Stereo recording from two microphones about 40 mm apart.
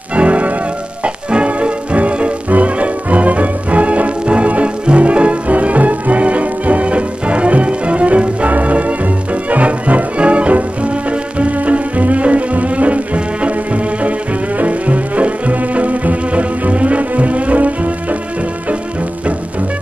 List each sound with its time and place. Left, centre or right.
0.1 s music: right